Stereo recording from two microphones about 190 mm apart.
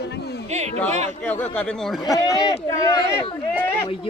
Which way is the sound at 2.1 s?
15° left (ahead or behind).